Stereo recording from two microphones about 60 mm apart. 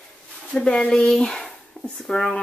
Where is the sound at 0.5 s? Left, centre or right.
Centre.